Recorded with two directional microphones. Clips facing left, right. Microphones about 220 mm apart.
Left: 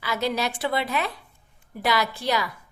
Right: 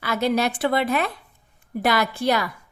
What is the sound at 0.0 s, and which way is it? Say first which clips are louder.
A woman's voice: right 4 dB; 55° right (ahead or behind).